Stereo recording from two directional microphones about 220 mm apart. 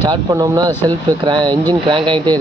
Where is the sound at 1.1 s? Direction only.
20° right (ahead or behind).